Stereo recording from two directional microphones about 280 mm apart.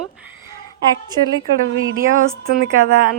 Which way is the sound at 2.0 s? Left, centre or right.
Right.